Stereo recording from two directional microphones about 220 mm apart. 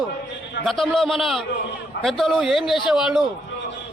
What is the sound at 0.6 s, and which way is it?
A man's voice, centre (ahead or behind).